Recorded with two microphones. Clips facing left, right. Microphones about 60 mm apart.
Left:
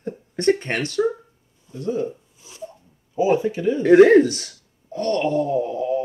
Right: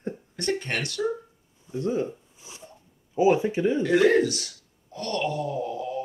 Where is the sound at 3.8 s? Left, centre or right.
Left.